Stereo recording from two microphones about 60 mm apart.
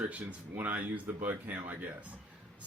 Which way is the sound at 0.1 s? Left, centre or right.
Right.